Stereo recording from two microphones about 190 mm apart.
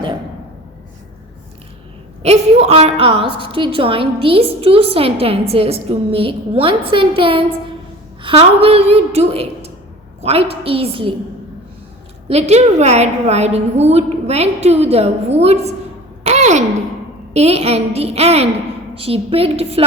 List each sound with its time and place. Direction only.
2.2 s a woman's voice: 35° right (ahead or behind)
12.3 s a woman's voice: 35° right (ahead or behind)
16.2 s a sound: 35° right (ahead or behind)
17.3 s a woman's voice: 35° right (ahead or behind)